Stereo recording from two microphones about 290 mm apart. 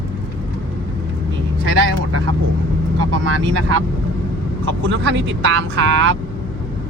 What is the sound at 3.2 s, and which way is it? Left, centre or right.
Speech, right.